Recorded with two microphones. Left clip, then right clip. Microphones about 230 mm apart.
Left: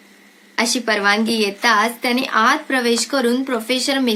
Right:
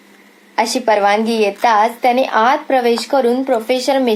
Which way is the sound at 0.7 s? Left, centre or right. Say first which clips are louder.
Right 5 dB; centre.